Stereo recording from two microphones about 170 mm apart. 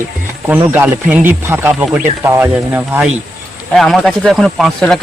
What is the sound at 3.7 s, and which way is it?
Speech, centre (ahead or behind).